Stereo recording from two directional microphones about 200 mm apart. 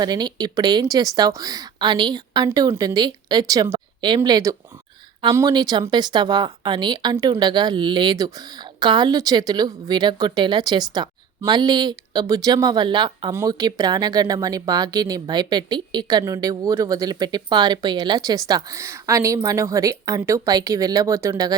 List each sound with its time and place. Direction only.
0.0 s a woman's voice: 20° right (ahead or behind)